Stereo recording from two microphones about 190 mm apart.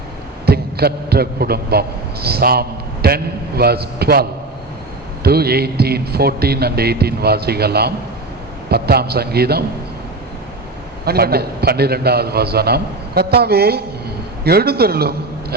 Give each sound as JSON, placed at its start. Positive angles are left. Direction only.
{"t": 0.4, "sound": "a man's voice", "side_deg": -55}
{"t": 11.0, "sound": "a man's voice", "side_deg": -55}